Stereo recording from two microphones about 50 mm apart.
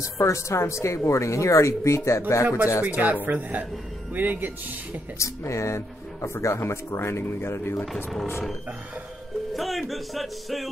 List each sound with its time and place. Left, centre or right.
0.0 s speech: left
2.8 s speech: right
5.2 s speech: left
7.8 s music: centre
9.5 s music: centre